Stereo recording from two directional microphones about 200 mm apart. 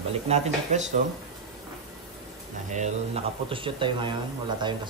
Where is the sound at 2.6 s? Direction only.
35° right (ahead or behind).